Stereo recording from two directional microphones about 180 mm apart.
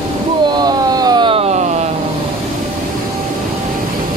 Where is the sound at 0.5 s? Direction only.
20° right (ahead or behind); by 1.9 s 40° right (ahead or behind).